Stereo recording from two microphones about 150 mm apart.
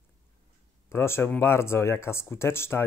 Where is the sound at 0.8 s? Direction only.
15° left (ahead or behind).